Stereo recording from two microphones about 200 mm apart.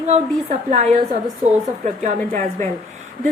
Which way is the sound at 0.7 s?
35° right (ahead or behind).